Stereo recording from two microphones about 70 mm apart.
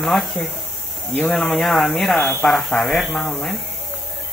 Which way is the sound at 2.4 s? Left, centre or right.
Centre.